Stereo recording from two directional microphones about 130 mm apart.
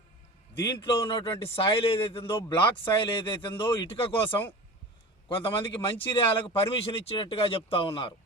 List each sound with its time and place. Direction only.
0.6 s a man's voice: 35° left (ahead or behind)